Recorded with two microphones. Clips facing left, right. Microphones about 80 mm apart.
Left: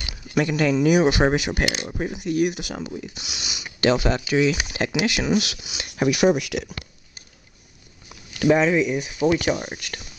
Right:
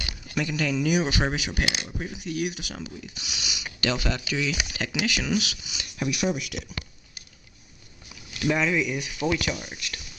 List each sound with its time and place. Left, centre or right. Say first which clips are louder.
0.4 s speech: left 7 dB; left
5.7 s speech: left 8 dB; left
8.5 s speech: left 6 dB; left
9.4 s speech: left 7 dB; left